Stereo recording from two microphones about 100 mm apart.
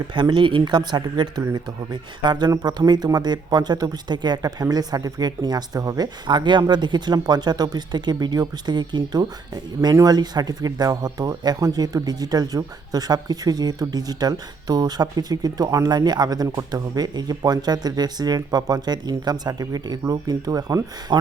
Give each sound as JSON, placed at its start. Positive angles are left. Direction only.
{"t": 0.1, "sound": "speech", "side_deg": -50}
{"t": 21.1, "sound": "speech", "side_deg": -50}